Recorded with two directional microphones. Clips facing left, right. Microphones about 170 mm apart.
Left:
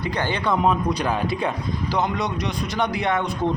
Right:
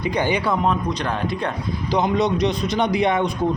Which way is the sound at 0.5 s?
5° left (ahead or behind).